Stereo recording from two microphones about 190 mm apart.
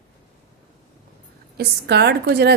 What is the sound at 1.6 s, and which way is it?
Speech, 60° right (ahead or behind).